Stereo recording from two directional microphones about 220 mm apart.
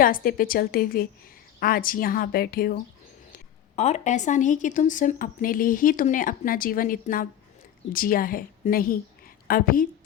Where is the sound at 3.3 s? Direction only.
30° left (ahead or behind).